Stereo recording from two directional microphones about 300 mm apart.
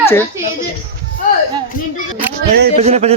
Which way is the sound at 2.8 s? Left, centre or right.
Right.